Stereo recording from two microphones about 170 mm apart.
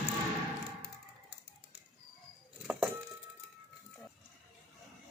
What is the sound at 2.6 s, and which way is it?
Music, 5° right (ahead or behind).